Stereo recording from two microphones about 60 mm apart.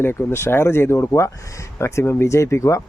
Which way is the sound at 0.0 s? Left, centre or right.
Left.